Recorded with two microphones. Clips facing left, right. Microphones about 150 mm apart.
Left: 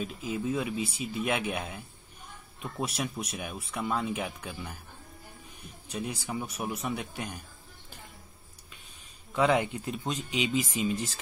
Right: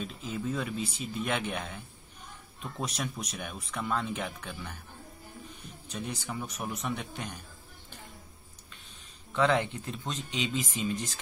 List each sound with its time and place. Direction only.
0.0 s speech: 10° left (ahead or behind)
5.9 s speech: 10° left (ahead or behind)
9.3 s speech: 10° left (ahead or behind)